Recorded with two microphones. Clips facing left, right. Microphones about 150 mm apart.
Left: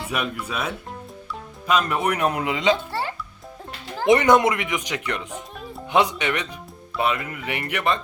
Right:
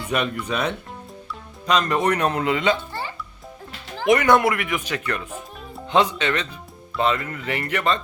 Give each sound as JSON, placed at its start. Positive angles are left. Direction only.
{"t": 0.1, "sound": "speech", "side_deg": 5}
{"t": 4.0, "sound": "speech", "side_deg": 25}